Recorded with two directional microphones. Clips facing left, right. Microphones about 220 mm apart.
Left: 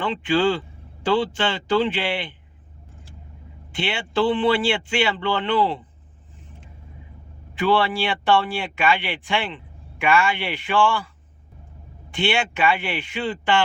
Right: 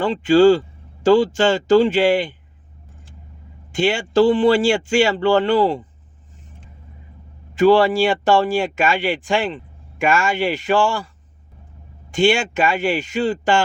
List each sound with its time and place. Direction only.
0.0 s speech: 40° right (ahead or behind)
3.7 s speech: 45° right (ahead or behind)
7.5 s speech: 45° right (ahead or behind)
12.1 s speech: 45° right (ahead or behind)